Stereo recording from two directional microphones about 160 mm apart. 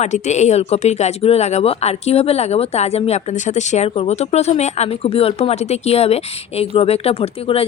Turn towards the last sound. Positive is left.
turn(degrees=35)  # may be behind; listen again after turning